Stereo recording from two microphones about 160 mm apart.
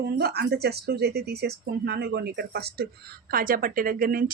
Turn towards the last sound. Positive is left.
turn(degrees=-65)  # may be behind; listen again after turning